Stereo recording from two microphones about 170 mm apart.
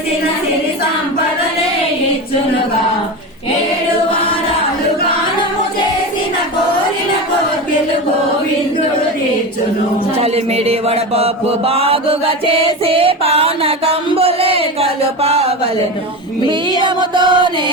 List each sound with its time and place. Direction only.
10.3 s mantra: 35° right (ahead or behind)
16.8 s music: 25° right (ahead or behind)